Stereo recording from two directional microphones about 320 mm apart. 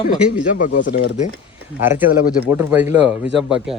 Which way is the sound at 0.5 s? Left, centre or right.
Left.